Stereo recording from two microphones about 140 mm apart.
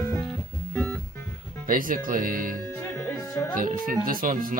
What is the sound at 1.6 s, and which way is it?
Speech, 75° right (ahead or behind).